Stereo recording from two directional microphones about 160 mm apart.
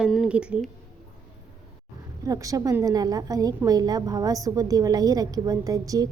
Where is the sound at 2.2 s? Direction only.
20° right (ahead or behind).